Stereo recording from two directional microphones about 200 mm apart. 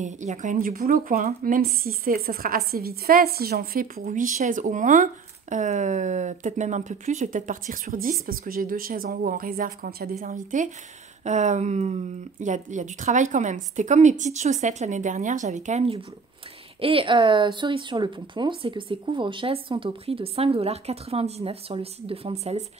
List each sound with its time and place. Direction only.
0.0 s a woman's voice: 35° right (ahead or behind)